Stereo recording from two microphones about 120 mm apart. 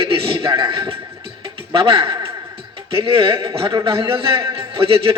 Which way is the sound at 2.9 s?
50° right (ahead or behind).